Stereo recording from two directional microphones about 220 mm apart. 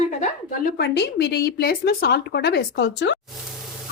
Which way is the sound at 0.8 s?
50° left (ahead or behind).